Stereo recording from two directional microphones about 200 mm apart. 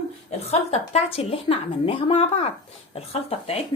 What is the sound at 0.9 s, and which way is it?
Speech, 30° left (ahead or behind).